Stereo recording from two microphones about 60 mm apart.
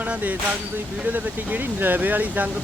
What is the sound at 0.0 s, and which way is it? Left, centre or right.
Vehicle, right.